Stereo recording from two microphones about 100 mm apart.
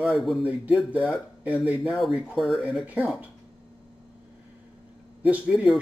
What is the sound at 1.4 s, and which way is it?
Speech, 10° right (ahead or behind).